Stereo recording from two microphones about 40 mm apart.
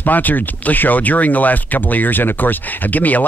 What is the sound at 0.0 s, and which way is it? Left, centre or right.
Speech, left.